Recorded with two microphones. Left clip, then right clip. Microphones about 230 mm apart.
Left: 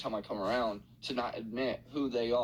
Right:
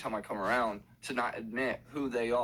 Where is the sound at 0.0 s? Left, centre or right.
Right.